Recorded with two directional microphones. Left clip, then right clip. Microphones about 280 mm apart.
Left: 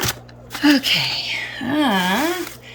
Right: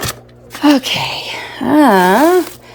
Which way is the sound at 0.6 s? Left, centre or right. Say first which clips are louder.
Right 4 dB; centre.